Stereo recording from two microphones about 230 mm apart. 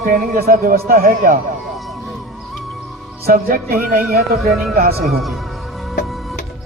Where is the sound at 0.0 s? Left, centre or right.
Right.